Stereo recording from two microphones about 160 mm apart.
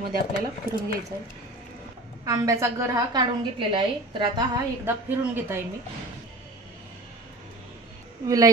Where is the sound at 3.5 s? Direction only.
30° right (ahead or behind).